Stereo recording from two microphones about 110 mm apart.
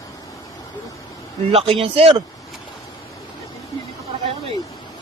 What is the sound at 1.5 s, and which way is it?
Speech, 60° right (ahead or behind).